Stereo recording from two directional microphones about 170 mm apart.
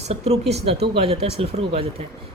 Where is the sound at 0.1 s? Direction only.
40° right (ahead or behind).